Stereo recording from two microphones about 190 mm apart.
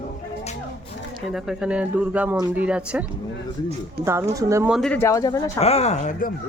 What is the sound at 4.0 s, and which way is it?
Speech, 55° right (ahead or behind).